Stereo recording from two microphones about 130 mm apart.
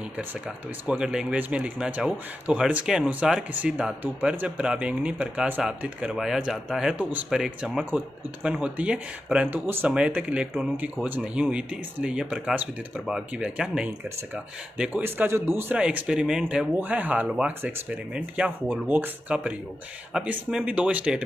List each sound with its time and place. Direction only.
0.8 s speech: 5° right (ahead or behind)